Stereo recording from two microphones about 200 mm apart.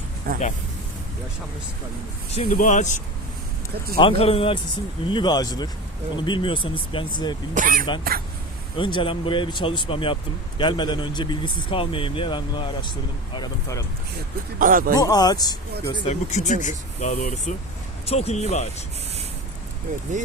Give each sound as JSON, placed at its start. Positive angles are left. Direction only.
{"t": 0.3, "sound": "speech", "side_deg": -45}
{"t": 2.3, "sound": "speech", "side_deg": 35}
{"t": 7.5, "sound": "speech", "side_deg": -40}
{"t": 8.8, "sound": "speech", "side_deg": 25}
{"t": 14.6, "sound": "speech", "side_deg": -45}
{"t": 14.9, "sound": "speech", "side_deg": 20}
{"t": 16.0, "sound": "speech", "side_deg": 35}